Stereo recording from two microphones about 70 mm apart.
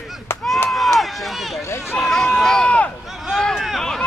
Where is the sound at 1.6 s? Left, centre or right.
Left.